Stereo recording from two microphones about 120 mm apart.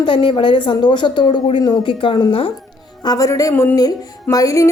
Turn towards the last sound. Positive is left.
turn(degrees=30)  # may be behind; listen again after turning